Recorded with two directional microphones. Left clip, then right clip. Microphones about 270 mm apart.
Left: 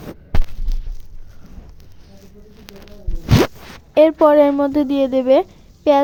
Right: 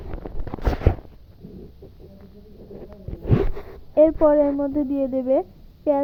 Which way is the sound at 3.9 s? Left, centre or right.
Left.